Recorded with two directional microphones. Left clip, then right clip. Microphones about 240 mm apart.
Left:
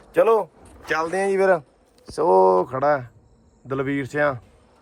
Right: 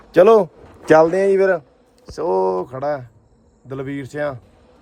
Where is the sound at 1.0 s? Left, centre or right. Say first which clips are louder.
Right 4 dB; centre.